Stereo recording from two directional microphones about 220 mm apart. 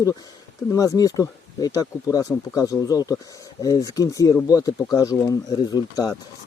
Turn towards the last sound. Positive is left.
turn(degrees=15)  # may be behind; listen again after turning